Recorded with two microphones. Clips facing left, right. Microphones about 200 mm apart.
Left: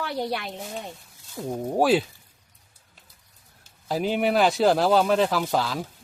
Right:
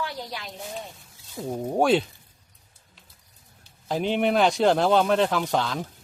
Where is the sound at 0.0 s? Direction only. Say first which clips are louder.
Left 5 dB; 60° left (ahead or behind).